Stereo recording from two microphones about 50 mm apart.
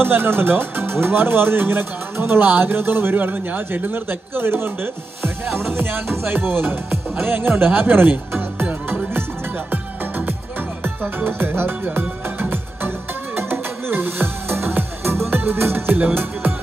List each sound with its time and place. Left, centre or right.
0.0 s speech: right
9.7 s music: right
15.1 s music: right
15.4 s speech: right